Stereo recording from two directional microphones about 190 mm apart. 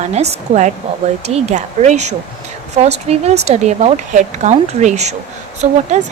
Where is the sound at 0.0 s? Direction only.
35° right (ahead or behind).